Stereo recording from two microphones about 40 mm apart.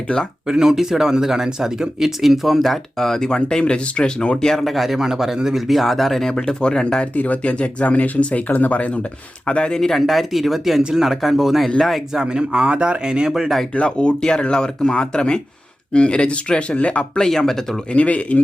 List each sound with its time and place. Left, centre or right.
0.4 s speech: centre; by 4.4 s left
4.4 s speech: centre
4.9 s speech: centre
6.3 s speech: left
7.2 s speech: left
8.5 s speech: left
9.5 s speech: left
9.8 s speech: centre
12.2 s speech: right
13.3 s speech: centre
13.7 s speech: left
17.2 s speech: centre
17.9 s speech: left